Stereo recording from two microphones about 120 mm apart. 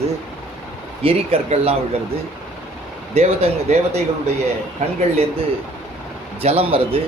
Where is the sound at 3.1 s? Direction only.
60° right (ahead or behind).